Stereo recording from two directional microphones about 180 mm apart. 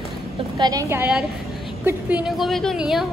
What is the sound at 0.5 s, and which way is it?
Speech, 20° right (ahead or behind).